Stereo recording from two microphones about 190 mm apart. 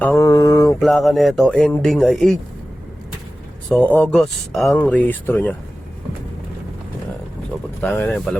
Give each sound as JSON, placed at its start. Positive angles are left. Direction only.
{"t": 0.0, "sound": "mantra", "side_deg": 15}
{"t": 0.8, "sound": "speech", "side_deg": 0}
{"t": 3.7, "sound": "speech", "side_deg": 10}
{"t": 7.8, "sound": "speech", "side_deg": 10}